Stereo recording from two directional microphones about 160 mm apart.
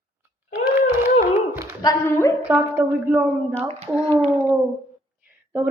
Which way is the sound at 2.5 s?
10° right (ahead or behind).